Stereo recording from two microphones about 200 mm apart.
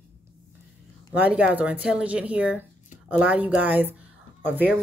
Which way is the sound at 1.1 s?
5° right (ahead or behind).